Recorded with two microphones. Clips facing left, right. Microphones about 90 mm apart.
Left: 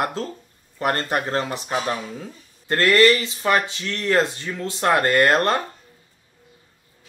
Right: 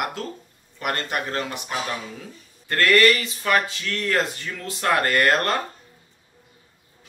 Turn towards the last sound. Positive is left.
turn(degrees=30)  # may be behind; listen again after turning